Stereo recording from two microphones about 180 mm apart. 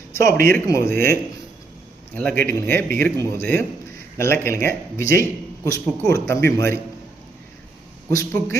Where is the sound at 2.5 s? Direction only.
10° left (ahead or behind).